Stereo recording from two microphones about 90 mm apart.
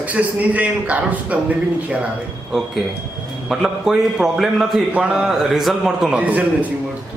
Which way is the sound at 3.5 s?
5° right (ahead or behind).